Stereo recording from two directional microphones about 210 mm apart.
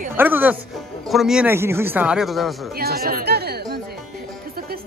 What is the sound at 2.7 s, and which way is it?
Speech, 45° right (ahead or behind).